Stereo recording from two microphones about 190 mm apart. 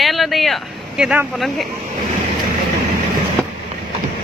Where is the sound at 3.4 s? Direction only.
5° left (ahead or behind).